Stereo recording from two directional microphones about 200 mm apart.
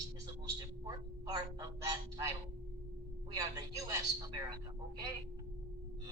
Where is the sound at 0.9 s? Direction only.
20° right (ahead or behind).